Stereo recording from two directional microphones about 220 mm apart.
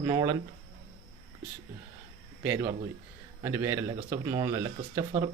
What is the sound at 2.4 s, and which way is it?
Speech, 10° right (ahead or behind).